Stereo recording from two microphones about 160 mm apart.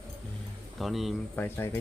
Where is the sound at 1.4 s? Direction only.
15° left (ahead or behind).